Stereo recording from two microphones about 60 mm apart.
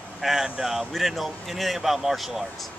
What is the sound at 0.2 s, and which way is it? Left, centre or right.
Speech, centre.